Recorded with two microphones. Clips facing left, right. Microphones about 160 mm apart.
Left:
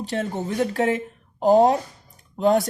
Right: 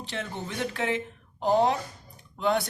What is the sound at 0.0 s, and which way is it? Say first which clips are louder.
Speech: left 8 dB; 40° left (ahead or behind).